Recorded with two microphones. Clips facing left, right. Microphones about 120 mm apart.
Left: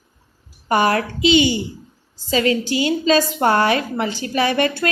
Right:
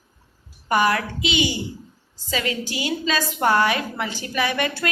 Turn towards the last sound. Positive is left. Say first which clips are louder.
# left 5 dB
turn(degrees=35)  # may be behind; listen again after turning